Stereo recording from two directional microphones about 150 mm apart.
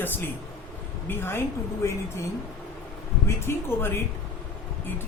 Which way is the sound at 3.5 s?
15° left (ahead or behind).